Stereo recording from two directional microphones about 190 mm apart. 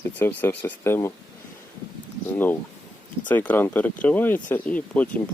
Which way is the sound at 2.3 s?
10° left (ahead or behind).